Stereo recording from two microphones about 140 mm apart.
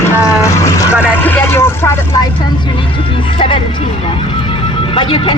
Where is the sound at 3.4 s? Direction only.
35° left (ahead or behind).